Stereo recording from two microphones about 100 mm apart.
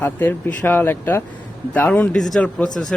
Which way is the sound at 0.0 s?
20° left (ahead or behind).